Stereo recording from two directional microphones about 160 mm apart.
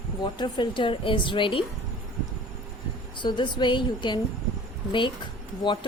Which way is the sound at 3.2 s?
30° left (ahead or behind).